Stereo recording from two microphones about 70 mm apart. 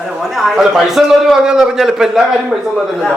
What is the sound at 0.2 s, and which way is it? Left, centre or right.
A man's voice, centre.